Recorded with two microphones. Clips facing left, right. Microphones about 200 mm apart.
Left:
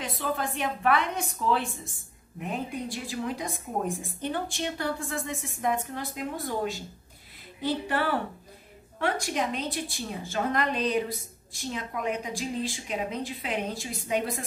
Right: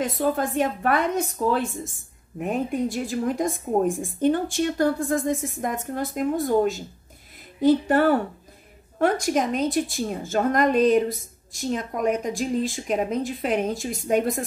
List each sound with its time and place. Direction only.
0.0 s a woman's voice: 45° right (ahead or behind)